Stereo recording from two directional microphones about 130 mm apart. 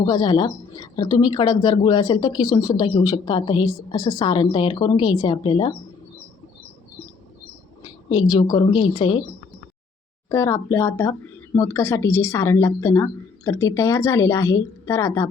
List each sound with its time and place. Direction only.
0.0 s a woman's voice: 30° left (ahead or behind)
2.8 s a woman's voice: 40° left (ahead or behind)
8.1 s a woman's voice: 30° left (ahead or behind)
10.2 s speech: 20° left (ahead or behind)